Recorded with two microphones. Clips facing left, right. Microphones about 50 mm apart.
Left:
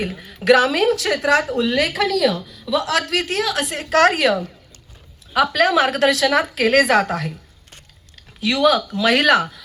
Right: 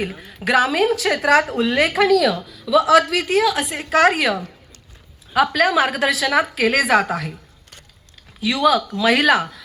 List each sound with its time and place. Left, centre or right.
0.0 s a woman's voice: centre; by 1.9 s right
2.0 s a woman's voice: centre
8.4 s a woman's voice: centre